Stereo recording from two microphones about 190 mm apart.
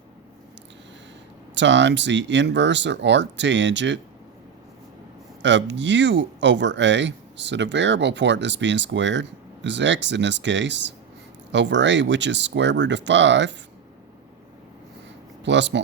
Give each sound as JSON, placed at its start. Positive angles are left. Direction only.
{"t": 1.5, "sound": "speech", "side_deg": -70}
{"t": 5.4, "sound": "speech", "side_deg": -70}
{"t": 15.4, "sound": "speech", "side_deg": -70}